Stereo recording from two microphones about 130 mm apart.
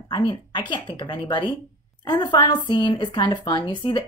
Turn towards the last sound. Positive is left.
turn(degrees=35)  # may be behind; listen again after turning